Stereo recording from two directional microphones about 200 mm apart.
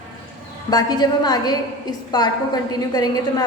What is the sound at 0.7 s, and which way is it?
A woman's voice, 20° left (ahead or behind).